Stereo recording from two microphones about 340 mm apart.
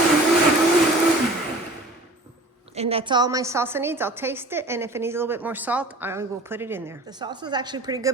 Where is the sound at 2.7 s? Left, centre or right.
Centre.